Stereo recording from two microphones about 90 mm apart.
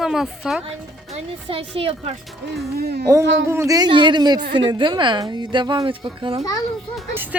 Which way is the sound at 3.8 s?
60° right (ahead or behind).